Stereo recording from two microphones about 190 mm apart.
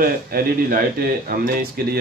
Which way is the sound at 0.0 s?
50° right (ahead or behind).